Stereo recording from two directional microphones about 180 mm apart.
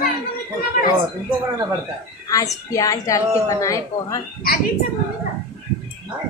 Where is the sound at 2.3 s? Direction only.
20° left (ahead or behind).